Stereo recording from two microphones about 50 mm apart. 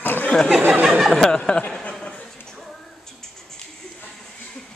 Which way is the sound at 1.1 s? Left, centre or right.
Centre.